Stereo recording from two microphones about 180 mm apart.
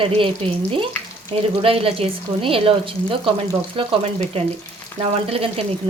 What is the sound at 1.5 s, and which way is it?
Speech, 30° right (ahead or behind).